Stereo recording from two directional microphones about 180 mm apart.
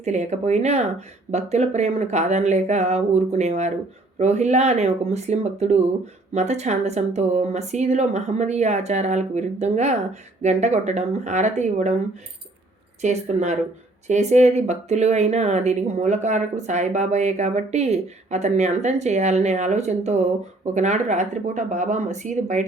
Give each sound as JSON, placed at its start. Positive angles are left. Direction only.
{"t": 0.0, "sound": "speech", "side_deg": -40}